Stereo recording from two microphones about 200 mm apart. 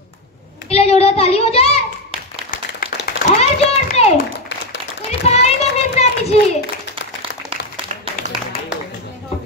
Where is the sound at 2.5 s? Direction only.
40° left (ahead or behind).